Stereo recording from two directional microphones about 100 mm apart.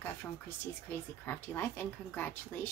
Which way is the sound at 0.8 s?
20° left (ahead or behind).